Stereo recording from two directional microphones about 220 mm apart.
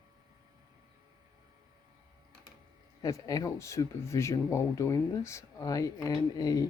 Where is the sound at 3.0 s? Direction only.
15° left (ahead or behind).